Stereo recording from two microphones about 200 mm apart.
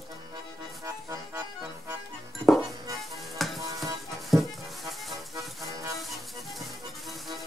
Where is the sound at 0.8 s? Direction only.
15° right (ahead or behind).